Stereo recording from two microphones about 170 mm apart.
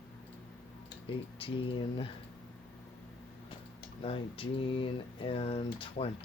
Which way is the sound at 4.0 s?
35° left (ahead or behind).